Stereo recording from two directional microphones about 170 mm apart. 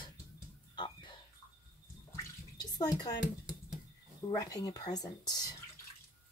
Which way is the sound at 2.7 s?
20° left (ahead or behind).